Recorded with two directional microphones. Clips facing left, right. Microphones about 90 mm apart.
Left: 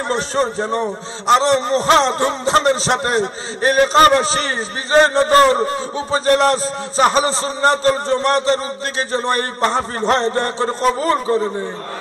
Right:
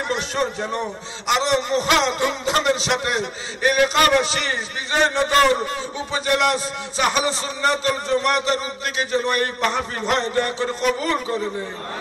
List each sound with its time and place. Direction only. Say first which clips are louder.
0.1 s a man's voice: left 6 dB; 35° left (ahead or behind)